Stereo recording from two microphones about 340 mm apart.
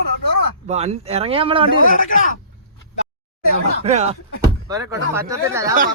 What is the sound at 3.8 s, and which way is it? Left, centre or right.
Speech, centre.